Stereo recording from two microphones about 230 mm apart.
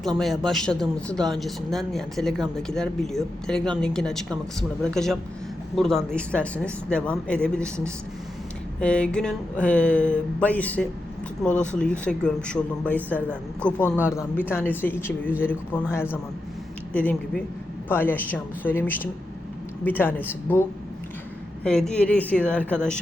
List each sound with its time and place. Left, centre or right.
0.2 s speech: centre
8.8 s speech: centre
13.1 s a man's voice: centre
13.6 s speech: centre